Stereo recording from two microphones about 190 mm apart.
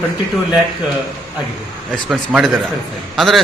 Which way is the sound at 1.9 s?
Centre (ahead or behind).